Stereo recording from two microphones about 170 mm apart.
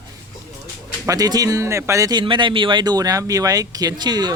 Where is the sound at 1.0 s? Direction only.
20° right (ahead or behind).